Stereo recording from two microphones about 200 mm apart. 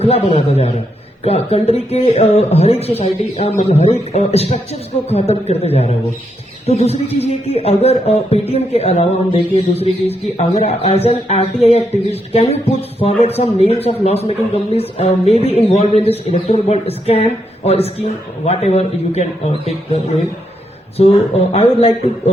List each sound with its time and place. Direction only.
0.0 s speech: 30° left (ahead or behind)
21.0 s speech: 30° left (ahead or behind)